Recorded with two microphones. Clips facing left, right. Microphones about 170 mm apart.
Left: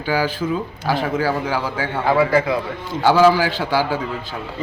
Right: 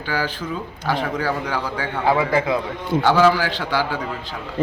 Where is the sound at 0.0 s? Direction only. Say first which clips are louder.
Left 5 dB; 10° left (ahead or behind).